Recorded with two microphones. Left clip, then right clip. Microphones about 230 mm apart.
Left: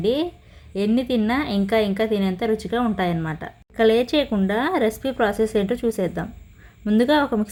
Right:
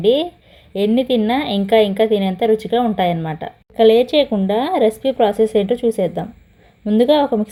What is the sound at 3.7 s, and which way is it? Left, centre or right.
Speech, left.